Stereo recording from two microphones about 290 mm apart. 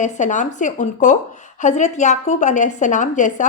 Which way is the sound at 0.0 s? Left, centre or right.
Left.